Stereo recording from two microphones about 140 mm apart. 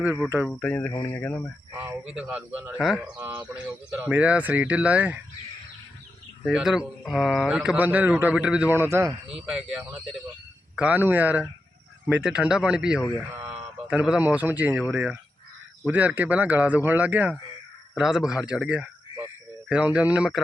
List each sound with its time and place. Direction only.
0.3 s speech: 10° right (ahead or behind)
0.5 s speech: 10° left (ahead or behind)
1.7 s speech: 10° right (ahead or behind)
3.2 s speech: 25° right (ahead or behind)
3.5 s speech: 5° right (ahead or behind)
6.4 s speech: 5° right (ahead or behind)
9.5 s speech: 5° right (ahead or behind)